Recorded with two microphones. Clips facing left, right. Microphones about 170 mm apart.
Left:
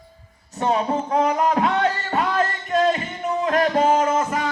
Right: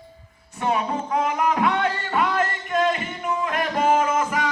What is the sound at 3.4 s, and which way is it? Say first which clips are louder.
Music: left 4 dB; 35° left (ahead or behind).